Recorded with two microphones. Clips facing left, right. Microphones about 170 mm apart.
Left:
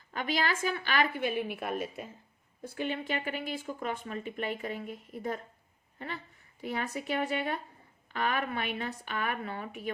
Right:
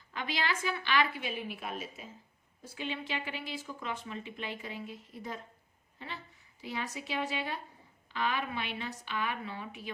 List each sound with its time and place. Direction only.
0.1 s speech: 45° left (ahead or behind)